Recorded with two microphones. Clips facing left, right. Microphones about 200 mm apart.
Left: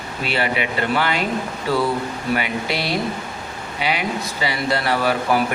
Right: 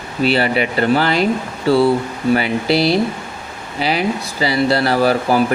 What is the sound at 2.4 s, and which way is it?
Speech, 35° right (ahead or behind).